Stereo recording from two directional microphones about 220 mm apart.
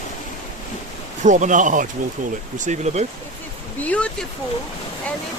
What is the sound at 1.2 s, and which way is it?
Speech, 35° right (ahead or behind).